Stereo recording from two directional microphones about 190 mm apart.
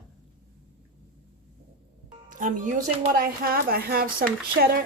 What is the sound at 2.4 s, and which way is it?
A woman's voice, 45° right (ahead or behind).